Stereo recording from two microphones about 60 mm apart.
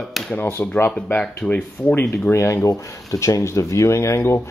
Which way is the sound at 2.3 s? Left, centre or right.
Left.